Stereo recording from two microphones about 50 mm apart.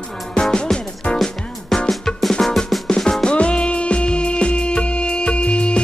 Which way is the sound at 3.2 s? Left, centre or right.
Centre.